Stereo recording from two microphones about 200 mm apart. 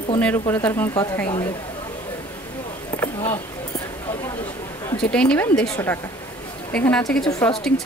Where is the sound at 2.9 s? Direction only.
10° left (ahead or behind).